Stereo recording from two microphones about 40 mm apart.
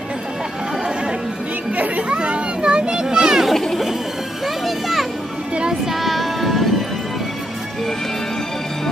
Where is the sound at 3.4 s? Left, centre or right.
Centre.